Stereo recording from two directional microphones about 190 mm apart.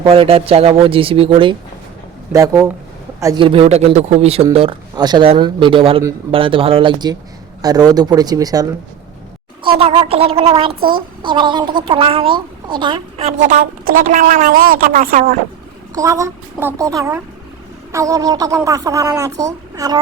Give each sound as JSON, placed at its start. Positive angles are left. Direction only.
{"t": 0.0, "sound": "speech", "side_deg": -30}
{"t": 2.3, "sound": "a man's voice", "side_deg": -15}
{"t": 3.4, "sound": "speech", "side_deg": -30}
{"t": 9.6, "sound": "a child's voice", "side_deg": -30}
{"t": 16.0, "sound": "a child's voice", "side_deg": -15}